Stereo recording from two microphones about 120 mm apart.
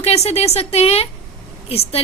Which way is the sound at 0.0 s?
60° left (ahead or behind).